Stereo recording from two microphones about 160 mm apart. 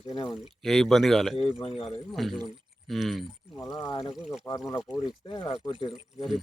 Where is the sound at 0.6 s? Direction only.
Centre (ahead or behind).